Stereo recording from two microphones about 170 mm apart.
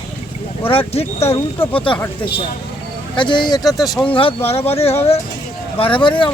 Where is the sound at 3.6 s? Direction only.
Centre (ahead or behind).